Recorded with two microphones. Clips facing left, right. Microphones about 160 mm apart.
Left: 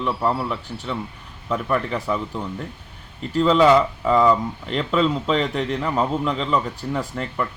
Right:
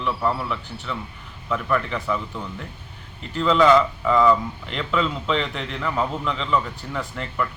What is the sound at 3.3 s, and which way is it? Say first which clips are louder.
A man's voice: left 2 dB; 35° left (ahead or behind).